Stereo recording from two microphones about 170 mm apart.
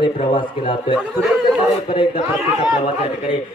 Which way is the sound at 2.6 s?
35° left (ahead or behind).